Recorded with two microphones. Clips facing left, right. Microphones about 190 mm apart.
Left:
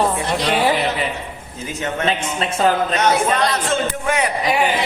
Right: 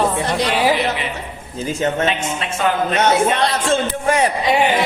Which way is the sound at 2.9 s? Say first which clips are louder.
Right 1 dB; 25° right (ahead or behind).